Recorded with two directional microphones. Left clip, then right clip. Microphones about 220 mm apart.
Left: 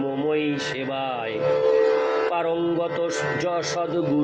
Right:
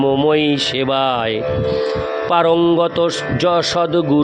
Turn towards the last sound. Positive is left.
turn(degrees=-50)  # may be behind; listen again after turning